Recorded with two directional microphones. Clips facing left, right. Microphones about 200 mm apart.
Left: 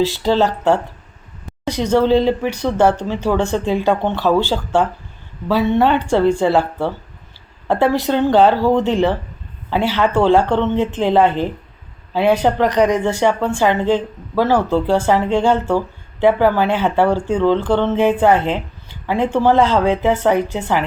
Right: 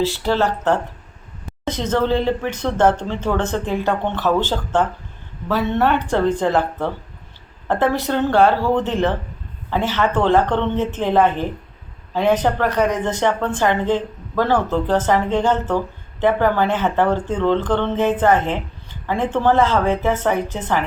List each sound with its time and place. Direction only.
0.0 s speech: 15° left (ahead or behind)
1.8 s speech: 10° left (ahead or behind)